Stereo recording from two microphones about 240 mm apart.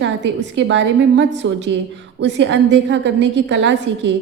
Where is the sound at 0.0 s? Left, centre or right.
Right.